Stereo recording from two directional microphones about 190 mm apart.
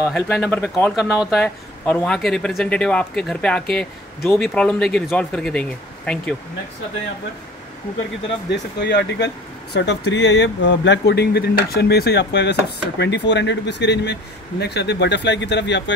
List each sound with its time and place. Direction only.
0.1 s speech: 5° left (ahead or behind)
8.5 s speech: 65° left (ahead or behind)